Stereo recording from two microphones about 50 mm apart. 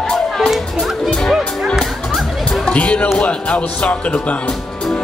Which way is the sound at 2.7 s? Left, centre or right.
Left.